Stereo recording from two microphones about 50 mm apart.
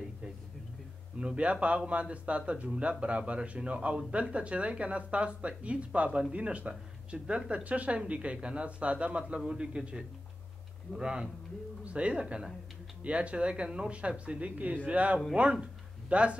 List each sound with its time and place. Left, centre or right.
1.2 s a man's voice: right